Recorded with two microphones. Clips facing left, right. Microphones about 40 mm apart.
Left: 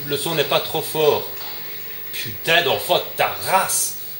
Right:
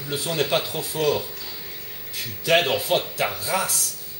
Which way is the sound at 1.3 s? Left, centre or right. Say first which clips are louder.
Left 2 dB; left.